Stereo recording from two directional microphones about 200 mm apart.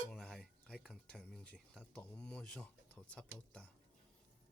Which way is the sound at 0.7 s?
5° left (ahead or behind).